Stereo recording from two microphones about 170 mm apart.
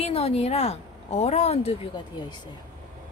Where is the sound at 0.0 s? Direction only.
35° left (ahead or behind).